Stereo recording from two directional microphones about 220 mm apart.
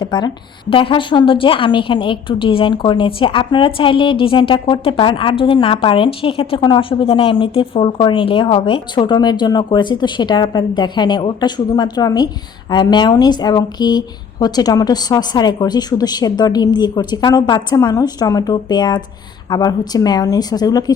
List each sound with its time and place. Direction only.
0.0 s a woman's voice: 20° left (ahead or behind)